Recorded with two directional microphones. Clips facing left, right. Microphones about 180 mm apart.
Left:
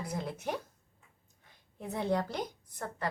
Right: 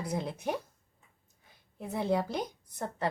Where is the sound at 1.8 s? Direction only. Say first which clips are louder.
Right 2 dB; 5° right (ahead or behind).